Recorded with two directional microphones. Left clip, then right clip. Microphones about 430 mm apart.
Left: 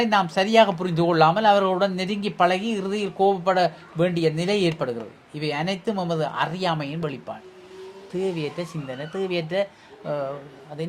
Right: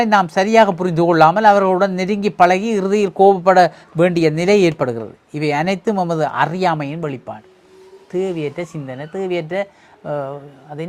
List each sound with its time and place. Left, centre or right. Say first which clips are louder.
0.0 s speech: right 6 dB; right